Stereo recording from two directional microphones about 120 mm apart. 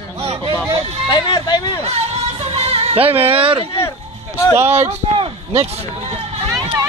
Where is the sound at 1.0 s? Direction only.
35° left (ahead or behind).